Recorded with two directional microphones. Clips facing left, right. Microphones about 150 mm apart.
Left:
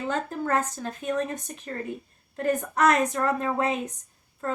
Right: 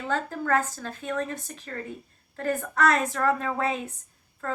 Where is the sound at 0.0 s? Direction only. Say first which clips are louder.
Left 1 dB; 20° left (ahead or behind).